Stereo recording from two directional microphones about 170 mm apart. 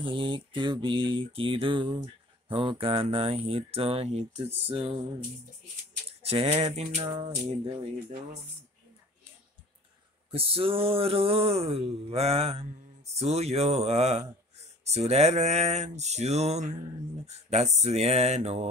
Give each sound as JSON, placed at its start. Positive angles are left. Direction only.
{"t": 0.0, "sound": "speech", "side_deg": -30}
{"t": 6.0, "sound": "a sound", "side_deg": -35}
{"t": 10.3, "sound": "speech", "side_deg": -35}